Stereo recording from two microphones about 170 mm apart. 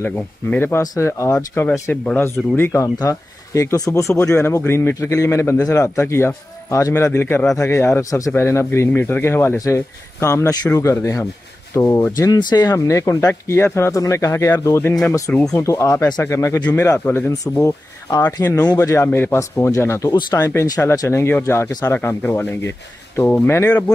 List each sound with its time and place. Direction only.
0.0 s speech: 10° left (ahead or behind)